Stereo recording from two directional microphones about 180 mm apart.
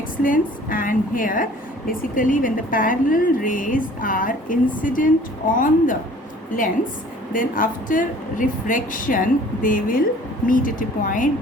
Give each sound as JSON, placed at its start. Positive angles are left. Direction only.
{"t": 0.2, "sound": "a woman's voice", "side_deg": 50}
{"t": 7.3, "sound": "a woman's voice", "side_deg": 50}